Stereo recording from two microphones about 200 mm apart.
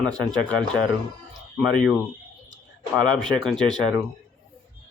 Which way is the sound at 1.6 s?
Centre (ahead or behind).